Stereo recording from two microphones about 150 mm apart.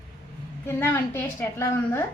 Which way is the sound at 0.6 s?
15° left (ahead or behind).